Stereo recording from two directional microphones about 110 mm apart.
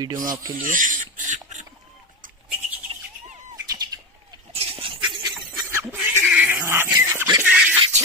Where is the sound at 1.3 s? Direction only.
90° right.